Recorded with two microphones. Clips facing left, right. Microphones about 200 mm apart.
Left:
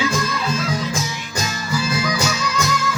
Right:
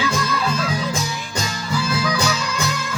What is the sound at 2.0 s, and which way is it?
Music, 60° right (ahead or behind).